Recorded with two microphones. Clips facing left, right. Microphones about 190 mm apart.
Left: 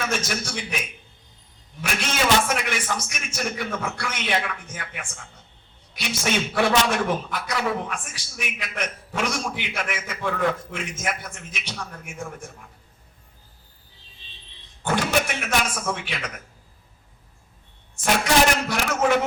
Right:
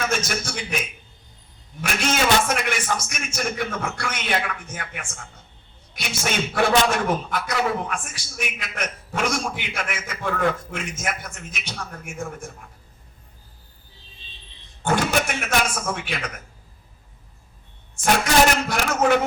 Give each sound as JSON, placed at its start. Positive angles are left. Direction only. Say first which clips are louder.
{"t": 0.2, "sound": "a man's voice", "louder": "right 1 dB", "side_deg": -45}
{"t": 1.8, "sound": "a man's voice", "louder": "right 3 dB", "side_deg": -45}
{"t": 14.8, "sound": "a man's voice", "louder": "right 1 dB", "side_deg": -45}
{"t": 18.7, "sound": "a man's voice", "louder": "right 2 dB", "side_deg": -45}